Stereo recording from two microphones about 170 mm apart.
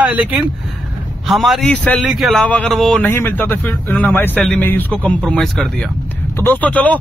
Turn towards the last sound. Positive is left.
turn(degrees=10)  # may be behind; listen again after turning